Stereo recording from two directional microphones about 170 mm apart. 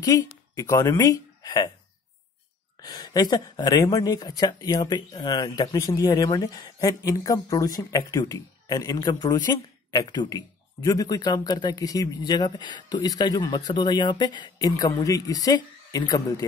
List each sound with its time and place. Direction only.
0.0 s a woman's voice: 20° left (ahead or behind)
2.8 s speech: 25° left (ahead or behind)